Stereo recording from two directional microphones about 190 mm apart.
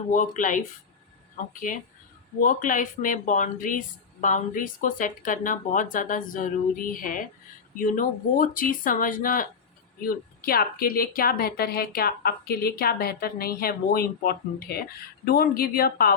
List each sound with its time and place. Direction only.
0.1 s speech: 45° left (ahead or behind)